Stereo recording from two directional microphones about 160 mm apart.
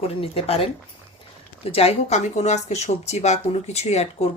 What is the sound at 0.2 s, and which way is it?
Speech, 40° left (ahead or behind).